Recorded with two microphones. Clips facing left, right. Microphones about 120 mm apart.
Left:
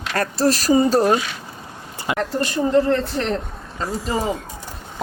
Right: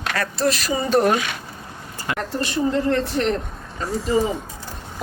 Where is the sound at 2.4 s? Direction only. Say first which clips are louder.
Left 3 dB; 40° left (ahead or behind).